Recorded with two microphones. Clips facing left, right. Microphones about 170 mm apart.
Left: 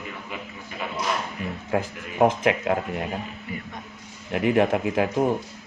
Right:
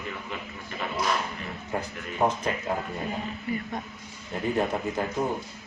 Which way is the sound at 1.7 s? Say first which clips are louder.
Left 5 dB; 90° left.